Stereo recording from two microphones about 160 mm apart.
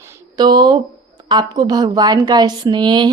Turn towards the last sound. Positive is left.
turn(degrees=-30)  # may be behind; listen again after turning